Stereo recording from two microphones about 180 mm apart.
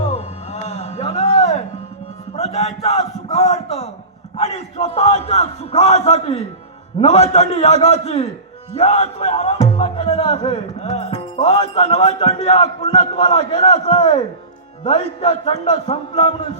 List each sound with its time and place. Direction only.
0.1 s music: 40° left (ahead or behind)
2.3 s a sound: 35° left (ahead or behind)
4.4 s speech: 30° left (ahead or behind)
8.8 s music: 40° left (ahead or behind)
10.0 s speech: 30° left (ahead or behind)